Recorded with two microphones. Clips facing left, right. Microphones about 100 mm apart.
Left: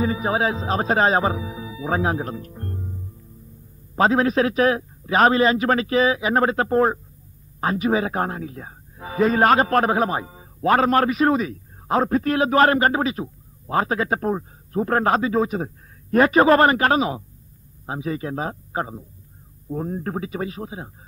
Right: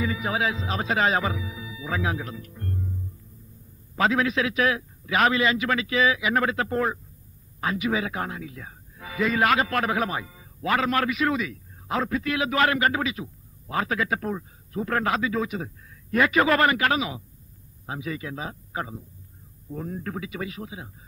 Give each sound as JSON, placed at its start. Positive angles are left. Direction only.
{"t": 0.0, "sound": "speech", "side_deg": 35}
{"t": 3.9, "sound": "speech", "side_deg": 35}